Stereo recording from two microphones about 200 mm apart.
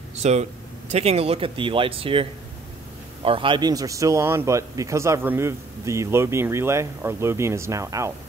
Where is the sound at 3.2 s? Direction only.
25° right (ahead or behind).